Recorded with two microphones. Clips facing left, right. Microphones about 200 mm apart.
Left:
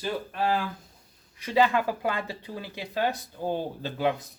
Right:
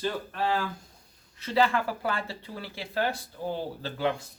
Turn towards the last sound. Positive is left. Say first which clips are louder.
# left 2 dB
turn(degrees=15)  # may be behind; listen again after turning